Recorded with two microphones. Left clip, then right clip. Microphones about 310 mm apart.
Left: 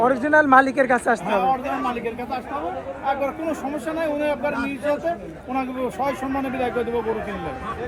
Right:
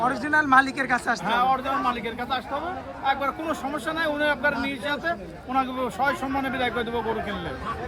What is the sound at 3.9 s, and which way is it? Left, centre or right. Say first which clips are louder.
Speech: left 1 dB; right.